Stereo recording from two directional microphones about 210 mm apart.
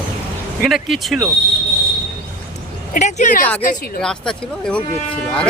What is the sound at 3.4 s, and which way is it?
A woman's voice, 10° left (ahead or behind).